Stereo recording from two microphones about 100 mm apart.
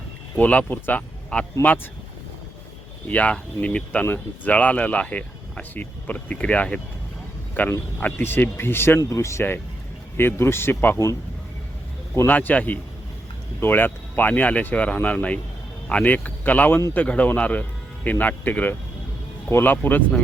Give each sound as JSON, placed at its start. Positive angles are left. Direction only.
{"t": 0.3, "sound": "speech", "side_deg": 15}
{"t": 3.1, "sound": "speech", "side_deg": 15}
{"t": 10.9, "sound": "speech", "side_deg": 35}
{"t": 12.1, "sound": "speech", "side_deg": 20}